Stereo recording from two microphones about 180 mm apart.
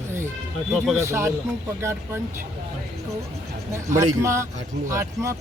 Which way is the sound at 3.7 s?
15° right (ahead or behind).